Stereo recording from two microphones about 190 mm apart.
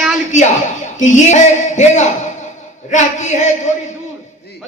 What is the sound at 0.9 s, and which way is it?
Speech, 40° left (ahead or behind).